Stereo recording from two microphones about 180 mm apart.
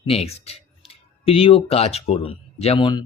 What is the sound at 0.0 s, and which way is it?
Speech, 35° left (ahead or behind).